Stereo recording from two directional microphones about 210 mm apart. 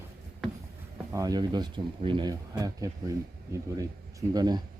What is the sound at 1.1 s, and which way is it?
Speech, 15° right (ahead or behind).